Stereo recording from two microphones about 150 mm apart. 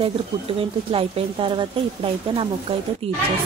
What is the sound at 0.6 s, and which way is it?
Speech, 35° right (ahead or behind).